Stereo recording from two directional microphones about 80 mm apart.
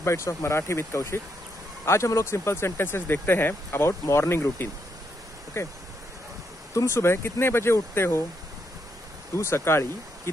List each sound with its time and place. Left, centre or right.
0.0 s speech: left
9.4 s speech: left